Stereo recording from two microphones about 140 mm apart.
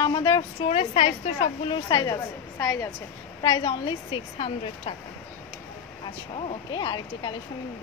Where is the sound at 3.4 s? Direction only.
35° left (ahead or behind).